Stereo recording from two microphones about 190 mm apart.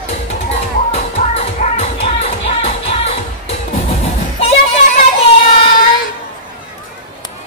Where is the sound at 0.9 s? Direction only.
35° left (ahead or behind).